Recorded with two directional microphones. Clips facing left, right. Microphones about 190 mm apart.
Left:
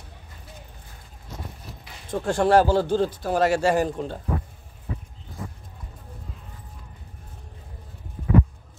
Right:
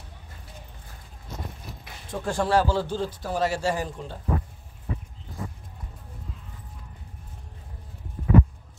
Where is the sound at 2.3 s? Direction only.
55° left (ahead or behind).